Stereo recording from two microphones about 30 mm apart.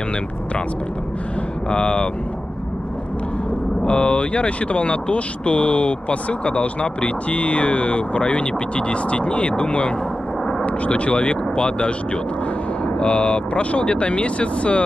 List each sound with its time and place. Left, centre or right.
1.7 s speech: left
3.8 s speech: left